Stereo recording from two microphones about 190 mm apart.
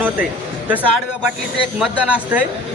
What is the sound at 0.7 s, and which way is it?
Speech, 10° right (ahead or behind).